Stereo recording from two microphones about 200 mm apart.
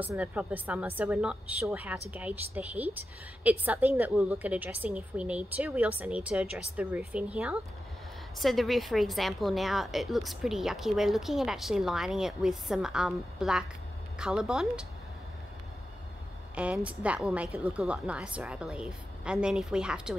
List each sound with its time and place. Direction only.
0.0 s a woman's voice: 10° right (ahead or behind)
16.5 s a woman's voice: 5° right (ahead or behind)